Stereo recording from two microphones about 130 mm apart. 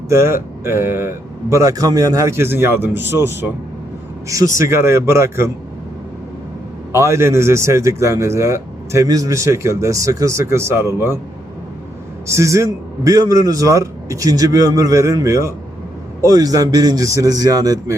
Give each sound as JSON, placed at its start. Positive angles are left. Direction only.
{"t": 0.1, "sound": "a man's voice", "side_deg": -20}
{"t": 6.9, "sound": "a man's voice", "side_deg": -20}
{"t": 12.3, "sound": "a man's voice", "side_deg": -25}